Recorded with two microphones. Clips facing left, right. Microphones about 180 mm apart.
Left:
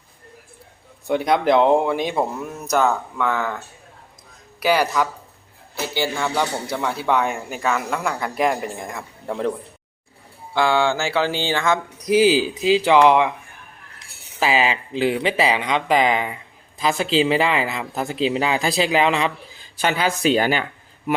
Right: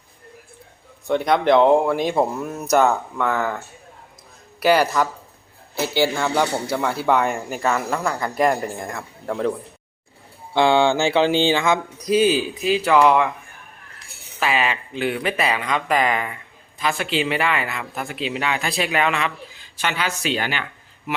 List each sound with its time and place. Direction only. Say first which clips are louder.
1.0 s a man's voice: even; 5° left (ahead or behind)
4.6 s speech: right 2 dB; 10° left (ahead or behind)
5.7 s a man's voice: right 4 dB; 10° right (ahead or behind)
10.5 s music: right 2 dB; 20° right (ahead or behind)
12.1 s speech: left 2 dB; 90° left
12.8 s speech: even; 20° left (ahead or behind)
14.3 s speech: left 2 dB; 25° left (ahead or behind)
19.8 s speech: left 5 dB; 40° left (ahead or behind)